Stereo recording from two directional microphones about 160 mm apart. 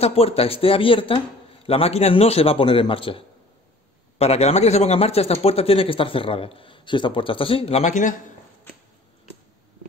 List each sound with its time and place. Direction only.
0.0 s speech: 40° left (ahead or behind)